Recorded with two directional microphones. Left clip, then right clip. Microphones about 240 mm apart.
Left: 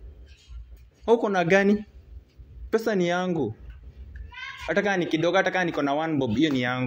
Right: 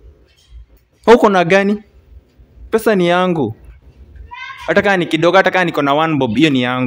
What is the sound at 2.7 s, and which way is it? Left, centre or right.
Speech, right.